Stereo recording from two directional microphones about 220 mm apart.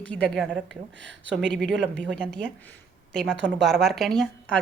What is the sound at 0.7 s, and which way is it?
Speech, 55° right (ahead or behind).